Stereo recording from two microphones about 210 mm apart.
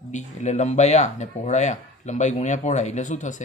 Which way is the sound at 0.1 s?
35° left (ahead or behind).